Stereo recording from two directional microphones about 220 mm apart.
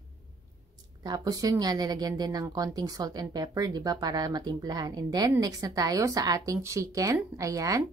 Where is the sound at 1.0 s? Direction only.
15° right (ahead or behind).